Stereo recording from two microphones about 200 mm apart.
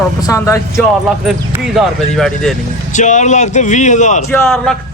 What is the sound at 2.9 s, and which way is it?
Speech, 35° left (ahead or behind).